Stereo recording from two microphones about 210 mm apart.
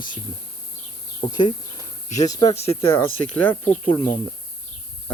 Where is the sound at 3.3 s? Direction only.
5° left (ahead or behind).